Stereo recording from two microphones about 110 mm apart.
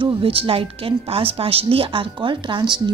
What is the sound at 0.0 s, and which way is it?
A woman's voice, 55° right (ahead or behind).